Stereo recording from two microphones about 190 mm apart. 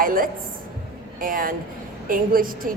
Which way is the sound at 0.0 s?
50° right (ahead or behind).